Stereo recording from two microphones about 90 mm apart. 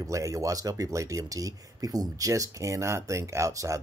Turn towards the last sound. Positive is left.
turn(degrees=-35)  # may be behind; listen again after turning